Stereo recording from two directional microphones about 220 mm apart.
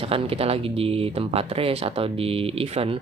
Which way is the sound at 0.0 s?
25° right (ahead or behind).